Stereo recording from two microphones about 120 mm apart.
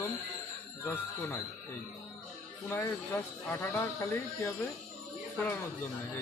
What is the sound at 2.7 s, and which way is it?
Speech, 20° left (ahead or behind).